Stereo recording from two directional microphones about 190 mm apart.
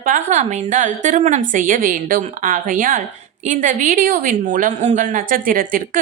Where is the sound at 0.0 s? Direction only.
40° right (ahead or behind).